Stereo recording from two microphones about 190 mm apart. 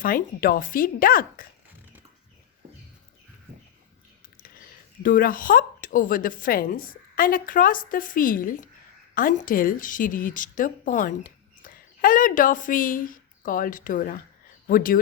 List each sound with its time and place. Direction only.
0.0 s a woman's voice: 50° left (ahead or behind)
5.0 s a woman's voice: 45° left (ahead or behind)